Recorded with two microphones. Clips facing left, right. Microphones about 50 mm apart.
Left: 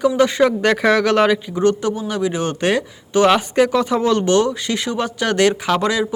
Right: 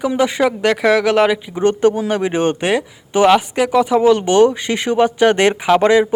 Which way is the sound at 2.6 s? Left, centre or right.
Centre.